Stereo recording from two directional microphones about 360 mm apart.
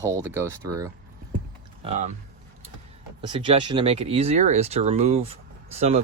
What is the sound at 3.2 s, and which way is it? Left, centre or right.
Speech, centre.